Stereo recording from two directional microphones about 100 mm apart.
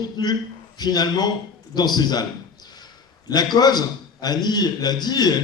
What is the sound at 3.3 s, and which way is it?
A man's voice, 45° left (ahead or behind).